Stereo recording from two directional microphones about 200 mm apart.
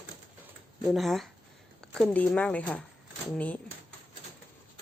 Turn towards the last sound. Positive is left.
turn(degrees=5)  # may be behind; listen again after turning